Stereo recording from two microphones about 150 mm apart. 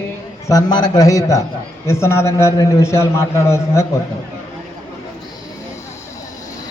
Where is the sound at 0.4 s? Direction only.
25° left (ahead or behind).